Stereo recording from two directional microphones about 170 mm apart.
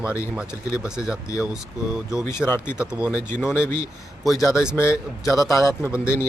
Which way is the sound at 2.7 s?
5° right (ahead or behind).